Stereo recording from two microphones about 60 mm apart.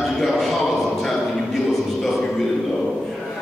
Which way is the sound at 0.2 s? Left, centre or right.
Centre.